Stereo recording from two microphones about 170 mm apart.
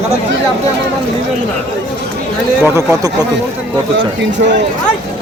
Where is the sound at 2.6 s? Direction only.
15° right (ahead or behind).